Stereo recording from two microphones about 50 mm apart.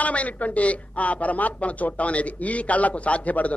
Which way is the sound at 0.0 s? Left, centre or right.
Left.